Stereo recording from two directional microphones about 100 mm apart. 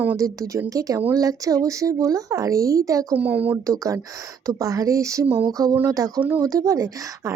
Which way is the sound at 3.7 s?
35° right (ahead or behind).